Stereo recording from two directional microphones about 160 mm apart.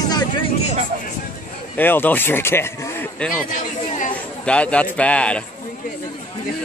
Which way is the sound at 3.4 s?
55° left (ahead or behind).